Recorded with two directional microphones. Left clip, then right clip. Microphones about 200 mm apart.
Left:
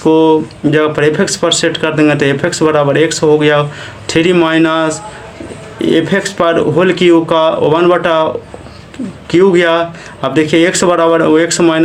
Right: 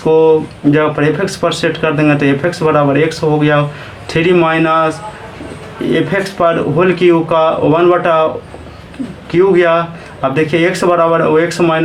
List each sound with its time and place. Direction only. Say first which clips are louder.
0.7 s speech: left 1 dB; 45° left (ahead or behind)
9.3 s speech: left 1 dB; 45° left (ahead or behind)